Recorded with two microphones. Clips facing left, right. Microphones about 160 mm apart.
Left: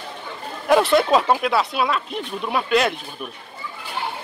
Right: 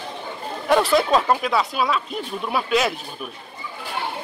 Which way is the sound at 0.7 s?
Centre (ahead or behind).